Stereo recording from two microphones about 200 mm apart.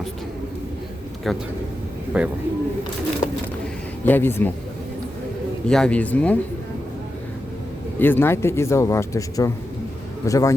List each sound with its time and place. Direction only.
1.2 s speech: centre (ahead or behind)
3.2 s bird: 35° left (ahead or behind)
4.0 s a man's voice: 10° left (ahead or behind)
5.6 s a man's voice: 5° left (ahead or behind)
7.9 s a man's voice: 10° left (ahead or behind)